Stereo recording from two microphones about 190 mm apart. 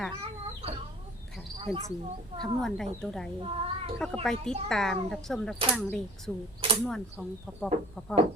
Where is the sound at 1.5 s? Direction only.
30° right (ahead or behind).